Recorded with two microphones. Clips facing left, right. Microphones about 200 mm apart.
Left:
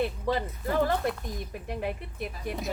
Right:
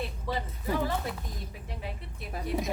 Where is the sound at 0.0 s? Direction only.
60° left (ahead or behind).